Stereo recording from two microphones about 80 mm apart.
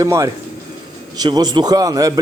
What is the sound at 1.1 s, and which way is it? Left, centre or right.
A man's voice, right.